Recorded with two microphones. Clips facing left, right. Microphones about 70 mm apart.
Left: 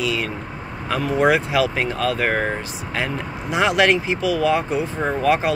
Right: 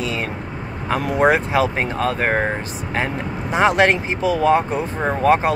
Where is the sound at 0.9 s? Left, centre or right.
Right.